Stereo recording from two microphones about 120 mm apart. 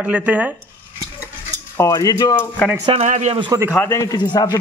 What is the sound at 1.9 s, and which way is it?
Speech, 30° left (ahead or behind).